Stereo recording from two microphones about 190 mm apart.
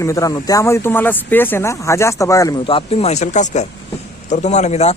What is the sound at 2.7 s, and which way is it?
Speech, 30° left (ahead or behind).